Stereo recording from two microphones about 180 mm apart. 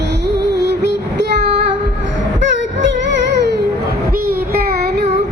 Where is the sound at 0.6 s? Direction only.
70° right (ahead or behind).